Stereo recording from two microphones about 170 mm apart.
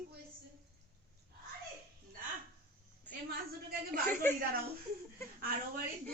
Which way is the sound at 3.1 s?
10° left (ahead or behind).